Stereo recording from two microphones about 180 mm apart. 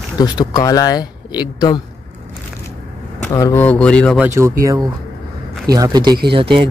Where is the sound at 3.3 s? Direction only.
15° left (ahead or behind).